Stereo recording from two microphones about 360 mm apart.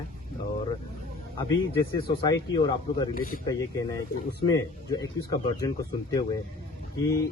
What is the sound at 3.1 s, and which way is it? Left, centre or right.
Speech, left.